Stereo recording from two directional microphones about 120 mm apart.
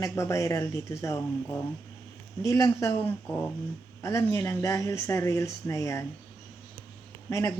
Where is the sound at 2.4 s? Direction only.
25° left (ahead or behind).